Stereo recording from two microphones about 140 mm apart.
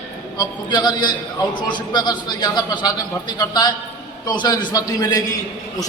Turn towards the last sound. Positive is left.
turn(degrees=25)  # may be behind; listen again after turning